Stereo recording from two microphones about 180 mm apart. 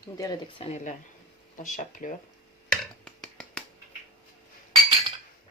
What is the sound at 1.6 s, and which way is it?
Speech, 45° left (ahead or behind).